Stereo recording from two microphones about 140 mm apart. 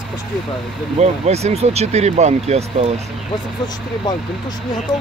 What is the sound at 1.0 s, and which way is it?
Speech, 50° right (ahead or behind).